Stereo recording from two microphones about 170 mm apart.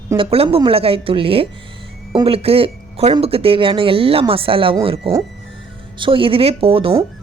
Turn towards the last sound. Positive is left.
turn(degrees=-35)  # may be behind; listen again after turning